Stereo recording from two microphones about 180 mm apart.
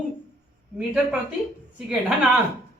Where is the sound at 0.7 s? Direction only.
5° right (ahead or behind).